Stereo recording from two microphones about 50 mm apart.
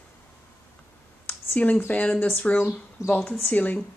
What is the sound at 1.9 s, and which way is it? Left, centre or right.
Speech, left.